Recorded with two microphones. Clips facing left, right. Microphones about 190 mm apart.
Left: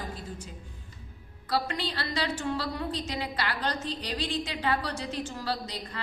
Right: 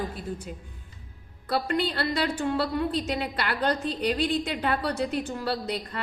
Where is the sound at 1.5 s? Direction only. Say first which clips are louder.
Right 4 dB; 55° right (ahead or behind).